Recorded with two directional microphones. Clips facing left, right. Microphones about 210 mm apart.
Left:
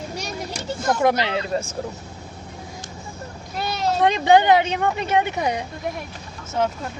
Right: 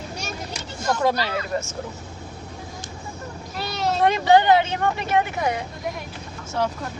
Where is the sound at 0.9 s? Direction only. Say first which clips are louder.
Left 2 dB; 20° left (ahead or behind).